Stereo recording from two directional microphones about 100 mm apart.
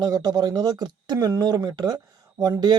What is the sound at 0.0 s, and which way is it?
Speech, 40° right (ahead or behind).